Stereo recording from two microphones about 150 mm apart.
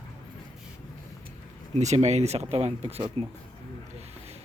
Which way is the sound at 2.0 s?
50° right (ahead or behind).